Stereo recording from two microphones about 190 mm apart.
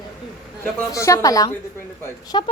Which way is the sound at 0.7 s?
15° left (ahead or behind).